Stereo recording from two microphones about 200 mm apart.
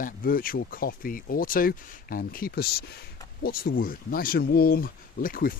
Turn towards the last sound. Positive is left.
turn(degrees=45)  # may be behind; listen again after turning